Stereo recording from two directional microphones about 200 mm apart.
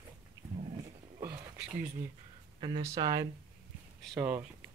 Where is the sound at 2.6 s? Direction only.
20° right (ahead or behind).